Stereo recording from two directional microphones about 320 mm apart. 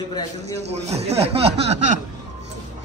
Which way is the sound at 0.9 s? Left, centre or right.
Centre.